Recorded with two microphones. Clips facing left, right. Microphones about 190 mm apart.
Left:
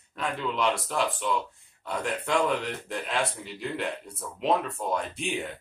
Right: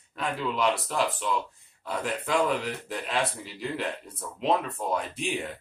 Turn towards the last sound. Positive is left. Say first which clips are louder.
# even
turn(degrees=0)  # may be behind; listen again after turning